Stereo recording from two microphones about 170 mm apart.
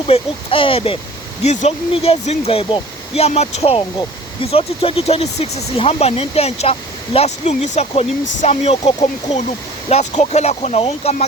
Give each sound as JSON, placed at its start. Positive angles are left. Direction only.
{"t": 0.1, "sound": "speech", "side_deg": 35}